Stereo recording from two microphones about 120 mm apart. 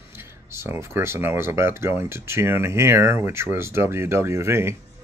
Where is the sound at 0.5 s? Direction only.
20° right (ahead or behind).